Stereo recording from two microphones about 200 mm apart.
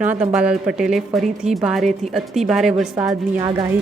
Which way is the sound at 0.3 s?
5° right (ahead or behind).